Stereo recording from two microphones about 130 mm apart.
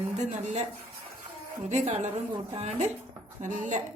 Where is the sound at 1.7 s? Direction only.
65° right (ahead or behind).